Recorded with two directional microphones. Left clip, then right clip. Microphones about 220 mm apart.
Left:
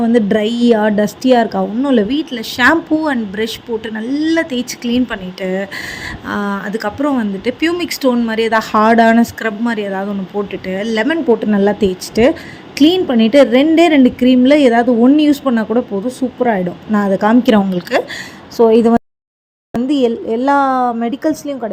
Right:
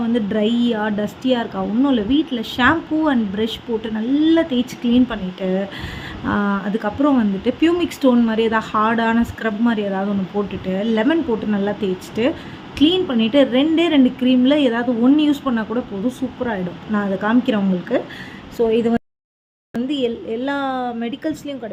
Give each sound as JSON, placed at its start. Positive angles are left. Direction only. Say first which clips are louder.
{"t": 0.1, "sound": "a woman's voice", "louder": "left 4 dB", "side_deg": 20}
{"t": 18.6, "sound": "speech", "louder": "left 8 dB", "side_deg": 15}